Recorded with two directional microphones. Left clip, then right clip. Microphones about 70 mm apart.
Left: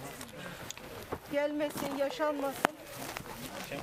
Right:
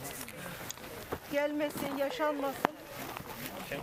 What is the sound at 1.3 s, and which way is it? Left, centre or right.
Speech, centre.